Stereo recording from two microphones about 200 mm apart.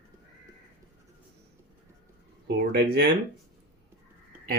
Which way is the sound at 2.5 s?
50° right (ahead or behind).